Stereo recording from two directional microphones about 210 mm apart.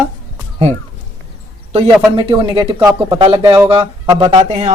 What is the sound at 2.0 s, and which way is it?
Speech, 25° right (ahead or behind).